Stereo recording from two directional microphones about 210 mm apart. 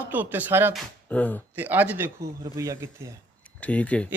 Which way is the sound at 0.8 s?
5° left (ahead or behind).